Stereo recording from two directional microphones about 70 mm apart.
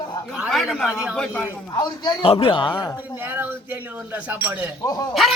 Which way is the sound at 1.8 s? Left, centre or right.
Left.